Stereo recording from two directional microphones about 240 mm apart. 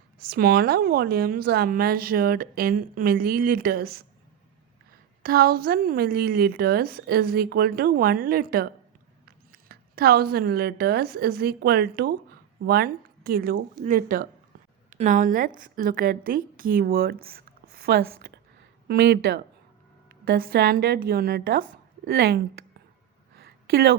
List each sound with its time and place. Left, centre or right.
0.3 s a woman's voice: right
5.2 s a woman's voice: right
23.3 s a sound: right